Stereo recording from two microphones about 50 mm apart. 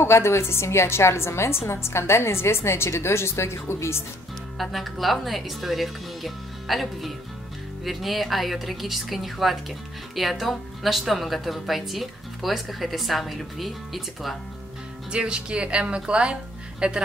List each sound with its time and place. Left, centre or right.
0.0 s a woman's voice: left
4.6 s a woman's voice: centre
15.0 s speech: centre